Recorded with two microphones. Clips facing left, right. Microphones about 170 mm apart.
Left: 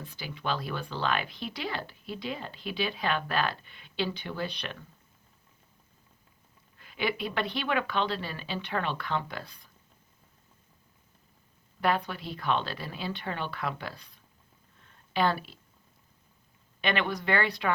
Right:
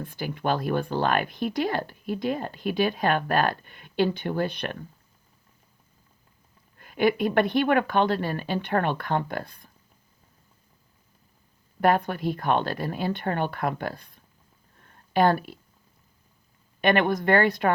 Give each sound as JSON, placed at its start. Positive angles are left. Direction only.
{"t": 0.0, "sound": "speech", "side_deg": -55}
{"t": 6.7, "sound": "speech", "side_deg": -50}
{"t": 11.8, "sound": "speech", "side_deg": -50}
{"t": 14.8, "sound": "a sound", "side_deg": -50}
{"t": 16.8, "sound": "speech", "side_deg": -50}